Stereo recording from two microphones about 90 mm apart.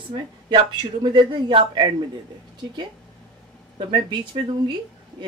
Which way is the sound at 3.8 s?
65° right (ahead or behind).